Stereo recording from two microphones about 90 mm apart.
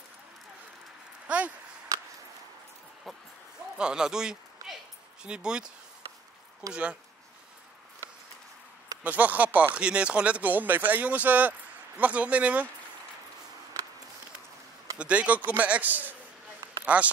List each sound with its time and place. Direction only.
1.2 s a sound: 15° right (ahead or behind)
3.7 s speech: 10° right (ahead or behind)
6.7 s speech: 15° right (ahead or behind)
9.0 s speech: 20° right (ahead or behind)
15.0 s a man's voice: 15° right (ahead or behind)